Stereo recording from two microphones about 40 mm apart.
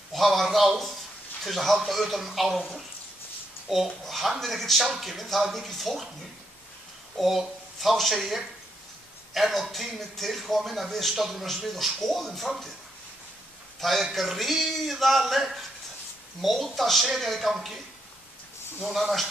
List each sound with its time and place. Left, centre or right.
0.1 s a sound: centre
1.4 s speech: centre
3.6 s speech: centre
7.2 s speech: centre
13.7 s a man's voice: centre